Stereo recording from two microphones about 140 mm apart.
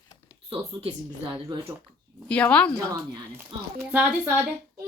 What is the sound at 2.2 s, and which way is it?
Speech, 10° left (ahead or behind).